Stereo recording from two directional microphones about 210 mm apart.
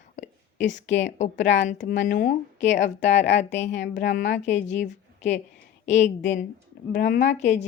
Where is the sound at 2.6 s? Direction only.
60° left (ahead or behind).